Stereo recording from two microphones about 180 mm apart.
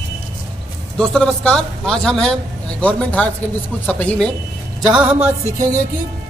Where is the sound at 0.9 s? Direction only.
5° left (ahead or behind).